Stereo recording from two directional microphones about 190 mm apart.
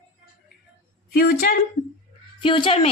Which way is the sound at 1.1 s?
50° left (ahead or behind).